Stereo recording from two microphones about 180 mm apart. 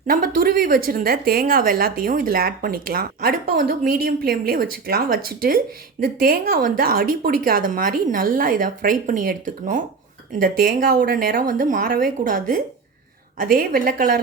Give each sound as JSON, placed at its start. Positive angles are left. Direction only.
{"t": 0.1, "sound": "a woman's voice", "side_deg": -50}